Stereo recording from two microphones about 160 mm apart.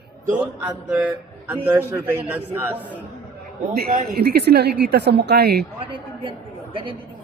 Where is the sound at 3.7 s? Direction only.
80° right.